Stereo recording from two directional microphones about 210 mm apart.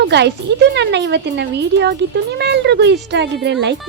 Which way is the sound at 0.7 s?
55° right (ahead or behind).